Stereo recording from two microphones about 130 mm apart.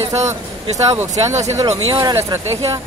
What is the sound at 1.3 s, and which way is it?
Speech, 60° right (ahead or behind).